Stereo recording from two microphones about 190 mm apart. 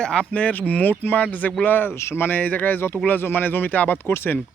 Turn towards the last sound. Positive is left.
turn(degrees=10)  # may be behind; listen again after turning